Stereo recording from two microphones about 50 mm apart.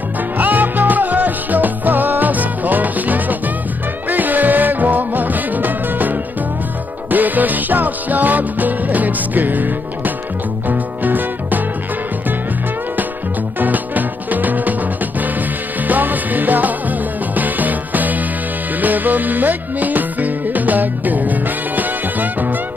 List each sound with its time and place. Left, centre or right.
0.4 s music: right
13.6 s music: right